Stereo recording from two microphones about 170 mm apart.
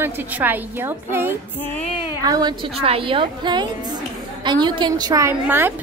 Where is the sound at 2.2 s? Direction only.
25° right (ahead or behind).